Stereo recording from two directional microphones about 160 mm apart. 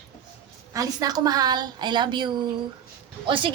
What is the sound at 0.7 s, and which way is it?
Speech, 25° right (ahead or behind).